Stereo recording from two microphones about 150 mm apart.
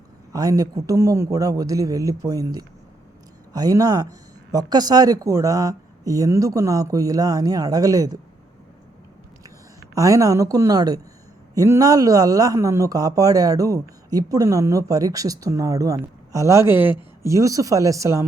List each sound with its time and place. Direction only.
0.3 s a man's voice: 25° right (ahead or behind)
9.9 s a man's voice: 20° right (ahead or behind)